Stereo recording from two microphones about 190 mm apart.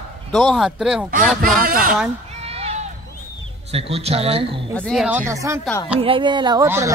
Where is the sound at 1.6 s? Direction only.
50° right (ahead or behind).